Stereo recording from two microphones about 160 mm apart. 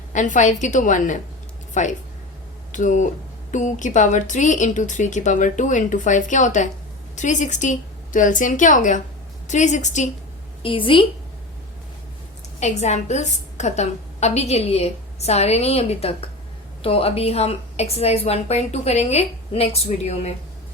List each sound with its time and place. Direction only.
0.1 s a woman's voice: 50° left (ahead or behind)
10.6 s a woman's voice: 30° left (ahead or behind)
12.5 s a woman's voice: 45° left (ahead or behind)